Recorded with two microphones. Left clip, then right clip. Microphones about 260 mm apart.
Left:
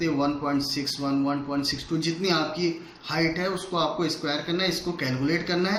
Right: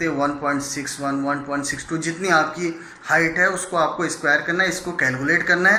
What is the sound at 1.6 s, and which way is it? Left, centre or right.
Speech, left.